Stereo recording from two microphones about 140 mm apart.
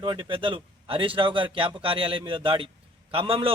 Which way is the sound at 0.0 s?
35° right (ahead or behind).